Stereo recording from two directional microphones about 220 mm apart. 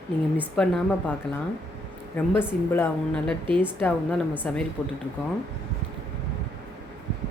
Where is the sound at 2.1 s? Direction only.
10° left (ahead or behind).